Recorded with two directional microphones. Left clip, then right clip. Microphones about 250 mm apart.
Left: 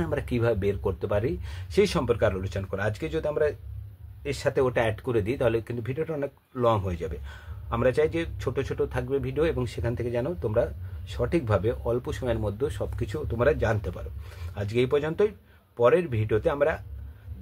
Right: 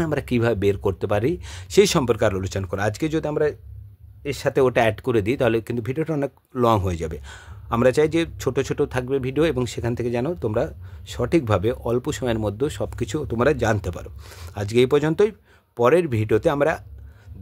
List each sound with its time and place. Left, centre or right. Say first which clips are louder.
0.0 s speech: right 5 dB; right